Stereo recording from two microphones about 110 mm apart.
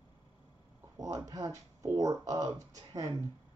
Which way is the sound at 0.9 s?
35° right (ahead or behind).